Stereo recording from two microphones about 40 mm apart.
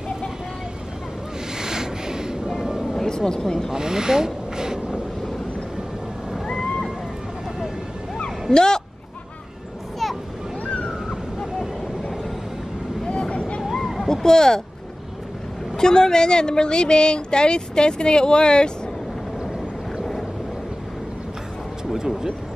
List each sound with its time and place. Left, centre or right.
1.6 s a sound: centre
3.0 s speech: centre
3.7 s rub: centre
8.5 s speech: centre
10.6 s a sound: left
13.1 s vehicle: left
13.6 s a sound: centre
15.7 s a woman's voice: centre
21.9 s music: centre